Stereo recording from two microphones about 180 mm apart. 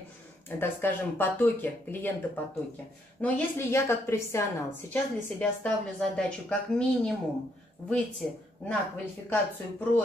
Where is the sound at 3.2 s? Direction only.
15° left (ahead or behind).